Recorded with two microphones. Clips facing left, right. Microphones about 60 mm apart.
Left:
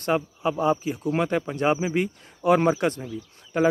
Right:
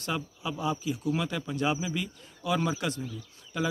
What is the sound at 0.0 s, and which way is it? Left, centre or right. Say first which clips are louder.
Speech: left 9 dB; left.